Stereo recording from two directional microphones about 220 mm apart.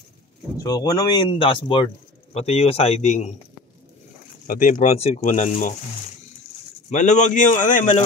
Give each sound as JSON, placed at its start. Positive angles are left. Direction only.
{"t": 0.6, "sound": "speech", "side_deg": 15}
{"t": 4.5, "sound": "speech", "side_deg": 35}
{"t": 6.9, "sound": "speech", "side_deg": 35}